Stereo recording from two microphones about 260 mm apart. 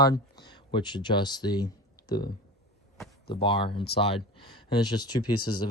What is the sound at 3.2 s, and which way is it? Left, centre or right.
Speech, centre.